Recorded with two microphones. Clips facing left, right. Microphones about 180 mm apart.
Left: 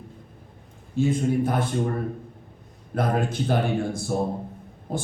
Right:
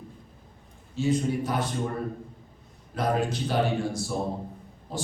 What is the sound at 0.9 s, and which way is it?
Speech, 50° left (ahead or behind).